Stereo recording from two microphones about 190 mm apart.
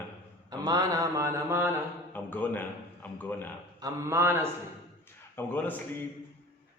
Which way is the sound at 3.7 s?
20° right (ahead or behind).